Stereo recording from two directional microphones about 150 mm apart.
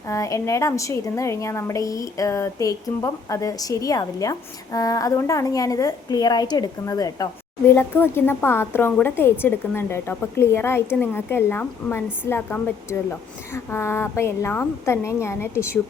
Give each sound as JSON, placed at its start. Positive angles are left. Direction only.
{"t": 0.1, "sound": "a woman's voice", "side_deg": 20}